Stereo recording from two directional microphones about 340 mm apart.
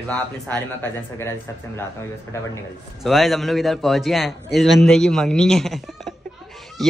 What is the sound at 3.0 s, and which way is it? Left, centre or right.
Speech, centre.